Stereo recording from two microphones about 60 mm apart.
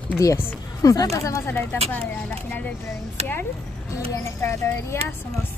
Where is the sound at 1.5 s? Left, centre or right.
Left.